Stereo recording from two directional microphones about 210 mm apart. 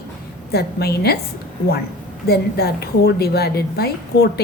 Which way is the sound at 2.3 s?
50° left (ahead or behind).